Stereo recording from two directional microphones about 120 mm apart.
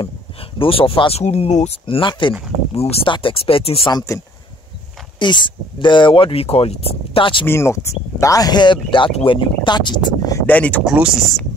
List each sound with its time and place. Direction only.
0.0 s speech: 50° left (ahead or behind)
1.2 s speech: 65° left (ahead or behind)
1.9 s speech: 45° left (ahead or behind)
2.7 s speech: 55° left (ahead or behind)
3.9 s speech: 25° left (ahead or behind)
5.2 s speech: 40° left (ahead or behind)
7.4 s speech: 20° left (ahead or behind)
10.4 s speech: 15° left (ahead or behind)
10.9 s speech: centre (ahead or behind)